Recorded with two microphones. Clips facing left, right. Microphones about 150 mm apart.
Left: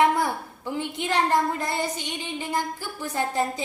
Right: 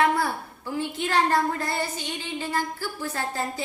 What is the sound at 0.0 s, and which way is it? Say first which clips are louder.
A woman's voice: left 2 dB; 20° left (ahead or behind).